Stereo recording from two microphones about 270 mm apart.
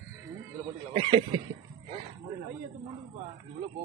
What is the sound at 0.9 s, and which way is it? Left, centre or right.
Speech, right.